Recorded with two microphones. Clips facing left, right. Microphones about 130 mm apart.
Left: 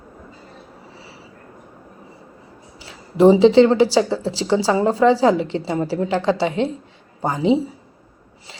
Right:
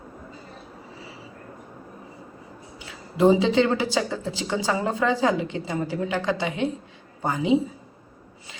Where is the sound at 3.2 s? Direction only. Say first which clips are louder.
Left 7 dB; 30° left (ahead or behind).